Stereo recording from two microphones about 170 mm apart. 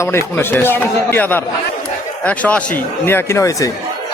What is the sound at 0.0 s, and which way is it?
Speech, 15° left (ahead or behind).